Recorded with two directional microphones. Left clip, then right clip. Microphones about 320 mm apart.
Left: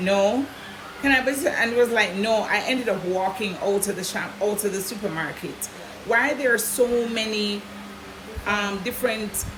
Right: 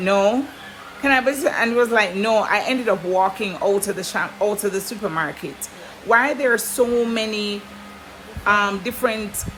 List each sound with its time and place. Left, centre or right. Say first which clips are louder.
0.0 s speech: right 3 dB; centre